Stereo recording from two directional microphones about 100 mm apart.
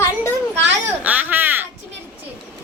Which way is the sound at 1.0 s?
15° right (ahead or behind).